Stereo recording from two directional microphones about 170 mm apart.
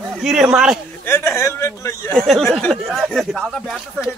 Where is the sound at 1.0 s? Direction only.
15° left (ahead or behind).